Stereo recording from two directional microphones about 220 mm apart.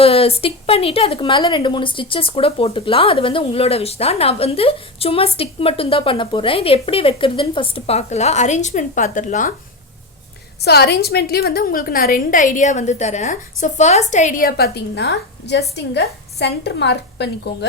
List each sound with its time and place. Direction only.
0.0 s speech: 25° left (ahead or behind)
10.6 s a woman's voice: 50° left (ahead or behind)